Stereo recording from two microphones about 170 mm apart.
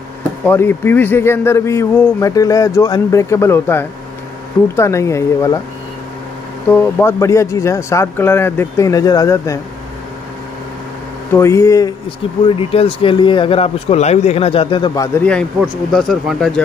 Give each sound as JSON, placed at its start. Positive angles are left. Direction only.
{"t": 0.5, "sound": "a man's voice", "side_deg": 10}
{"t": 6.7, "sound": "a man's voice", "side_deg": 15}
{"t": 11.3, "sound": "a man's voice", "side_deg": 15}
{"t": 12.4, "sound": "speech", "side_deg": 30}
{"t": 15.1, "sound": "a man's voice", "side_deg": 5}